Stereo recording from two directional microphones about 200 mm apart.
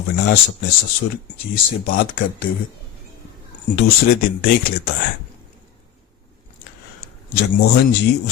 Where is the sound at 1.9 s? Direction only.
45° left (ahead or behind).